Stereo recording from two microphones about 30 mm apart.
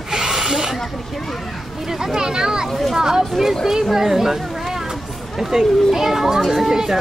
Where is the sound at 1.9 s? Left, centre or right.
Centre.